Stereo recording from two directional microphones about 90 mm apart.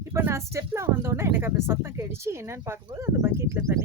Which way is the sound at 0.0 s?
30° right (ahead or behind).